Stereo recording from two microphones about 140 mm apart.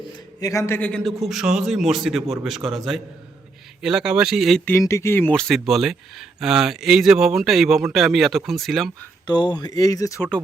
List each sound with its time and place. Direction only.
0.3 s a man's voice: 25° left (ahead or behind)
0.8 s speech: 10° left (ahead or behind)
4.6 s speech: 15° left (ahead or behind); by 8.9 s centre (ahead or behind)
9.2 s speech: 30° left (ahead or behind)